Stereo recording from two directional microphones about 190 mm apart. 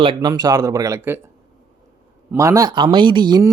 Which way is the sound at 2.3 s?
15° right (ahead or behind).